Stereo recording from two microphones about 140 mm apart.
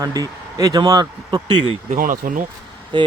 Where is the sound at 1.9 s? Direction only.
70° right (ahead or behind).